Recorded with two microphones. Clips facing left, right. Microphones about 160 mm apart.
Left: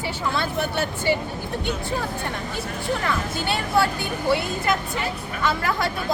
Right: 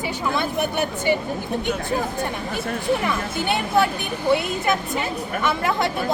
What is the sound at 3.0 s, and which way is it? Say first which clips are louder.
Speech: right 2 dB; 20° right (ahead or behind).